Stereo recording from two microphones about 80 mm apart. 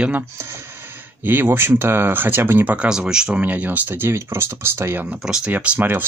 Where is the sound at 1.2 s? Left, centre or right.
Right.